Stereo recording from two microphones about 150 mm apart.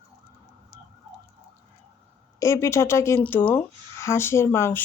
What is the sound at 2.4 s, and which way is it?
Speech, 20° left (ahead or behind).